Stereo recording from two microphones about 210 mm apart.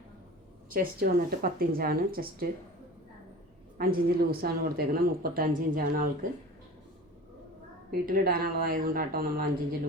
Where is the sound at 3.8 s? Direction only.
45° right (ahead or behind).